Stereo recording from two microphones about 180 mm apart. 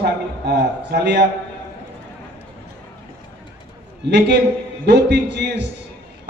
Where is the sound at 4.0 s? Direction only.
70° right (ahead or behind).